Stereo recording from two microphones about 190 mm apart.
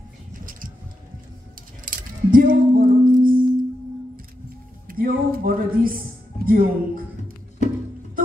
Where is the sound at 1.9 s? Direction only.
45° right (ahead or behind).